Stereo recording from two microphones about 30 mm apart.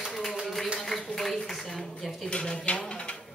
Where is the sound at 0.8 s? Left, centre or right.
Centre.